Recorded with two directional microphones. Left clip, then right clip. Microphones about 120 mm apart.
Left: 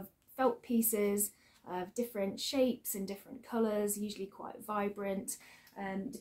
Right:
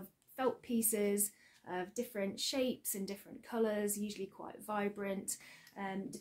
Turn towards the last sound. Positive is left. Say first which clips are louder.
# left 1 dB
turn(degrees=-25)  # may be behind; listen again after turning